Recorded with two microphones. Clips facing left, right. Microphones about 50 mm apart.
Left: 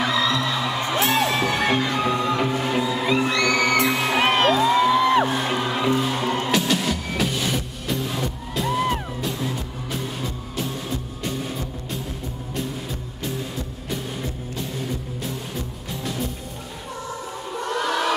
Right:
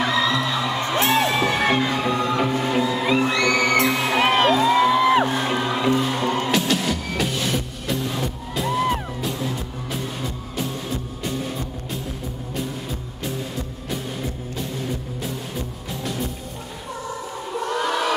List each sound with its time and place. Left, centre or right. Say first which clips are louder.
0.0 s music: right 1 dB; centre
13.8 s music: right 1 dB; centre
17.5 s crowd: right 1 dB; centre